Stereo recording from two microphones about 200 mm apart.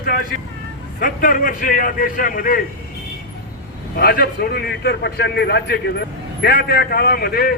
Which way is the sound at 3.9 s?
50° left (ahead or behind).